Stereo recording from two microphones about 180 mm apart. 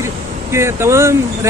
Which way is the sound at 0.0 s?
15° right (ahead or behind).